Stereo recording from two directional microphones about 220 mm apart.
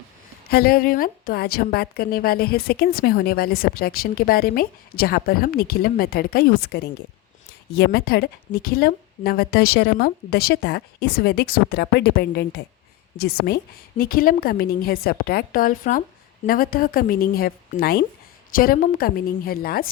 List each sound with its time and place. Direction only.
0.4 s a woman's voice: 45° left (ahead or behind)